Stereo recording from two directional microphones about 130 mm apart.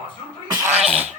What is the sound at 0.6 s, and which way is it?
Cough, 20° right (ahead or behind).